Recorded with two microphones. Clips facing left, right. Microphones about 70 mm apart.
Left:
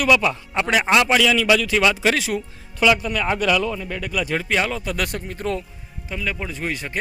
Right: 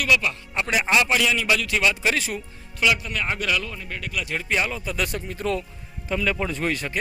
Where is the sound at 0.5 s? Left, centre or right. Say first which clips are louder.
Left 3 dB; left.